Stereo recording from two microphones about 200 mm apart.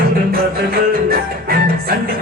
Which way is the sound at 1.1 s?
50° right (ahead or behind).